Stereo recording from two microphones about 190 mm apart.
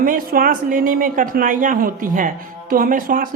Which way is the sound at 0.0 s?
50° right (ahead or behind).